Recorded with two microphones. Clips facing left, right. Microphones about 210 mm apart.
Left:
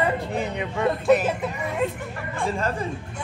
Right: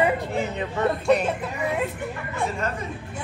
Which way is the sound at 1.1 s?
Centre (ahead or behind).